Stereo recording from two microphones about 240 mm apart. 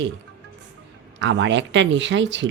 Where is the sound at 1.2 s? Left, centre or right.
Right.